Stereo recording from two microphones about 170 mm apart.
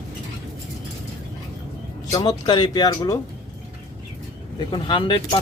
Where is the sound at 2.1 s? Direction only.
25° left (ahead or behind).